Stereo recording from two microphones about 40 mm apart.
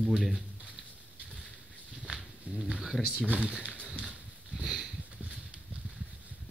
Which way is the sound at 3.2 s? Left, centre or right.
Right.